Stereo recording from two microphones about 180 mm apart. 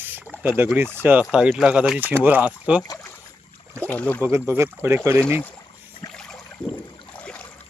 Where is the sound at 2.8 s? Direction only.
20° left (ahead or behind).